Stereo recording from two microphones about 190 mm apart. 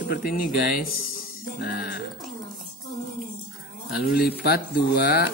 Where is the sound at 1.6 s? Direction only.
60° left (ahead or behind).